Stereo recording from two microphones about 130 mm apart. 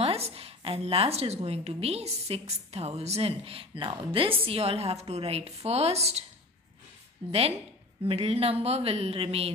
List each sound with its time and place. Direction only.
0.0 s a woman's voice: 50° right (ahead or behind)
7.2 s a woman's voice: 50° right (ahead or behind)